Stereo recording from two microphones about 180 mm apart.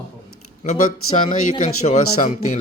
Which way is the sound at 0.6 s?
45° left (ahead or behind).